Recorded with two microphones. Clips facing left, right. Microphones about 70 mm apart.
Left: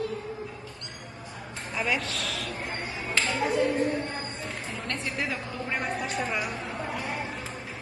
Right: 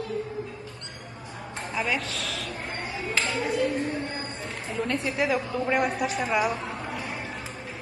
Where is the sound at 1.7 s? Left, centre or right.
Centre.